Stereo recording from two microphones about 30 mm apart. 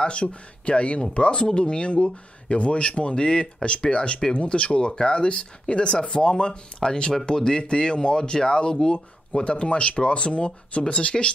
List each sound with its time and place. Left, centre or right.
0.0 s speech: left
9.4 s speech: left